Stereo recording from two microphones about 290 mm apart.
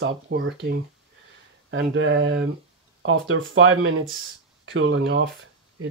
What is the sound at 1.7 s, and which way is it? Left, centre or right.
Speech, right.